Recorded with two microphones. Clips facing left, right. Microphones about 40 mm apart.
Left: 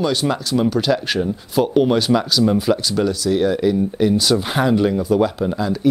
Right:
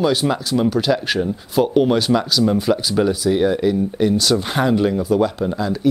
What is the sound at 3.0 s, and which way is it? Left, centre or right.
Speech, centre.